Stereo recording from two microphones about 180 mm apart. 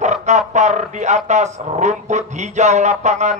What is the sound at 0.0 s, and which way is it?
A man's voice, 40° right (ahead or behind).